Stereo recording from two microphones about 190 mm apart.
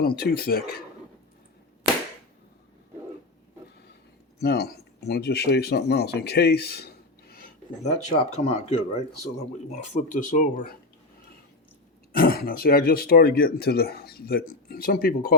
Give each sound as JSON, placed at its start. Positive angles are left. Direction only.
{"t": 0.0, "sound": "speech", "side_deg": 55}
{"t": 4.4, "sound": "speech", "side_deg": 55}
{"t": 9.9, "sound": "speech", "side_deg": 40}
{"t": 12.1, "sound": "speech", "side_deg": 50}